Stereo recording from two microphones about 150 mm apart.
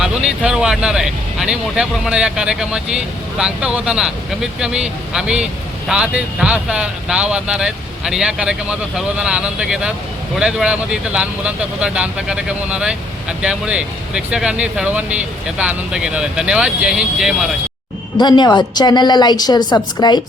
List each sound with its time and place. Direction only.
0.0 s speech: 5° right (ahead or behind)
18.2 s a woman's voice: 30° left (ahead or behind)